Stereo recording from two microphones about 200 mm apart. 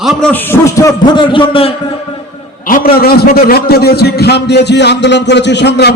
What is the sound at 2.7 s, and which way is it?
A man's voice, 45° left (ahead or behind).